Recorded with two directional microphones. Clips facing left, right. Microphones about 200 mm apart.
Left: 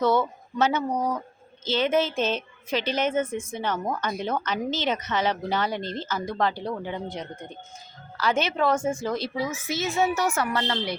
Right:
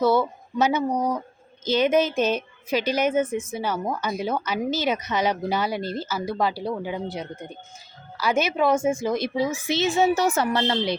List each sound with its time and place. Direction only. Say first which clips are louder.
0.0 s a woman's voice: right 2 dB; 10° right (ahead or behind)